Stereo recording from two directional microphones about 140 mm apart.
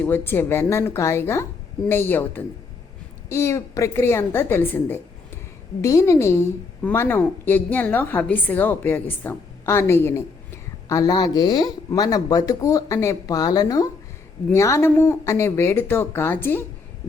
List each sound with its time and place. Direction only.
0.0 s a woman's voice: 15° left (ahead or behind)